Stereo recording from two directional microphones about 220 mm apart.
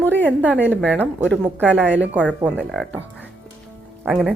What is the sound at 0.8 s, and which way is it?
Speech, 5° left (ahead or behind).